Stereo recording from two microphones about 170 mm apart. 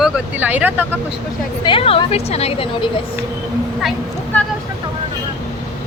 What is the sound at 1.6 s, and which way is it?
A woman's voice, 30° left (ahead or behind).